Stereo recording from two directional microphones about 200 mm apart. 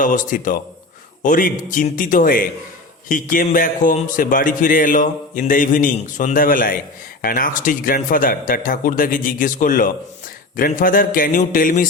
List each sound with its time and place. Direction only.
0.0 s a man's voice: 40° left (ahead or behind)